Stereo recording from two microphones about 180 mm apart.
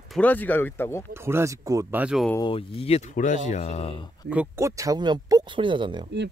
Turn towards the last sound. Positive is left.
turn(degrees=-25)  # may be behind; listen again after turning